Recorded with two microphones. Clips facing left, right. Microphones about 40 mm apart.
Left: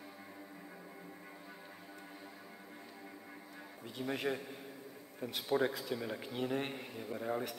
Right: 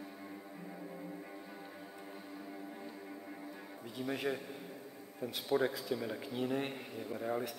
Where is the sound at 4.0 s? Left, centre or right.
Left.